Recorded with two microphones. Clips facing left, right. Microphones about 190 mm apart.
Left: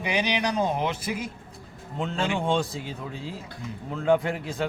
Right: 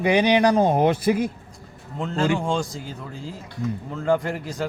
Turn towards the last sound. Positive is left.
turn(degrees=0)  # may be behind; listen again after turning